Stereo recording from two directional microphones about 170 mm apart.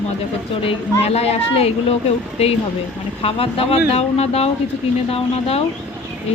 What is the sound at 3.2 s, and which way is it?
A woman's voice, 35° left (ahead or behind).